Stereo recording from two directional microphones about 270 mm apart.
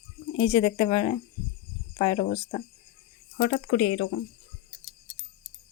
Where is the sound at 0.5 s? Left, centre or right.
Centre.